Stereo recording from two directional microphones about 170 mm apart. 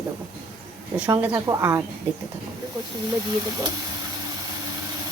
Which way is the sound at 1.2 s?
20° right (ahead or behind).